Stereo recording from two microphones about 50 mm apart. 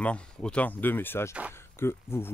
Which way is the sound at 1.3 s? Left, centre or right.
Right.